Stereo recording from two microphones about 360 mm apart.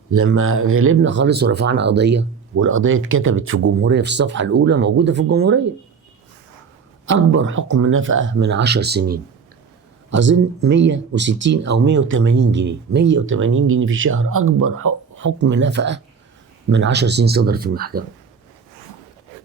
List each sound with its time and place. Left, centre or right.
0.2 s speech: right
7.1 s speech: right